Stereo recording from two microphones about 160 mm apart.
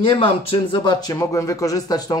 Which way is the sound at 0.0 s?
35° left (ahead or behind).